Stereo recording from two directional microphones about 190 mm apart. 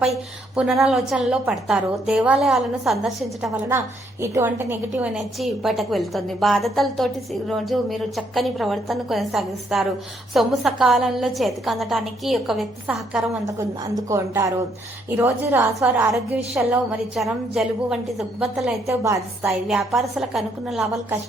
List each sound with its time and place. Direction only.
0.5 s a woman's voice: 5° right (ahead or behind)
3.7 s a woman's voice: 15° right (ahead or behind)
13.6 s a woman's voice: 15° right (ahead or behind); by 18.7 s centre (ahead or behind)
18.9 s a woman's voice: 15° right (ahead or behind)
19.5 s a woman's voice: centre (ahead or behind)